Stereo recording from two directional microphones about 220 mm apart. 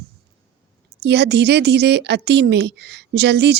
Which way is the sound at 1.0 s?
50° right (ahead or behind).